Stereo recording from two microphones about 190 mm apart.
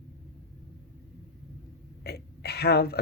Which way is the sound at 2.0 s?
55° left (ahead or behind).